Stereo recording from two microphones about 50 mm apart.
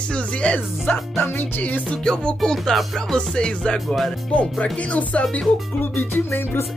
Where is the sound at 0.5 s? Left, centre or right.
Left.